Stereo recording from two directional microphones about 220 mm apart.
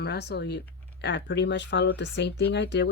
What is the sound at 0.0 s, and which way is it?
Speech, 50° left (ahead or behind).